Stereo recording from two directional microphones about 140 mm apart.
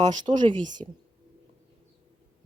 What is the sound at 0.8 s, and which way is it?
Speech, 40° right (ahead or behind).